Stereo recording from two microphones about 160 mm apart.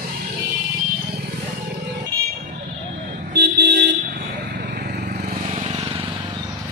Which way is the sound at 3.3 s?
90° right.